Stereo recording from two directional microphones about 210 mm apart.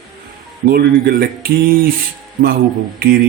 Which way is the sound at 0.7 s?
45° right (ahead or behind).